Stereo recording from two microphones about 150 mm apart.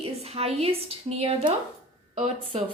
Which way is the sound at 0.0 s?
40° right (ahead or behind).